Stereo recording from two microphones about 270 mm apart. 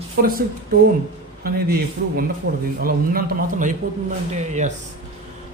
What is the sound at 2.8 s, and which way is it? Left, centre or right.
Speech, right.